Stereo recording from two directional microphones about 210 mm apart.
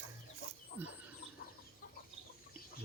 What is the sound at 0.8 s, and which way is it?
Bird, 10° right (ahead or behind).